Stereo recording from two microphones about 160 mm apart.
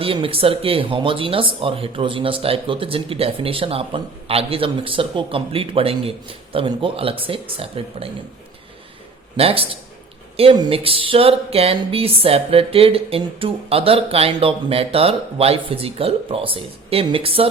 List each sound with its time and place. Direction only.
0.0 s speech: 35° right (ahead or behind)
9.4 s speech: 35° right (ahead or behind)